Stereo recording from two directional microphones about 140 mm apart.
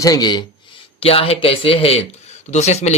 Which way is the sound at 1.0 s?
45° left (ahead or behind).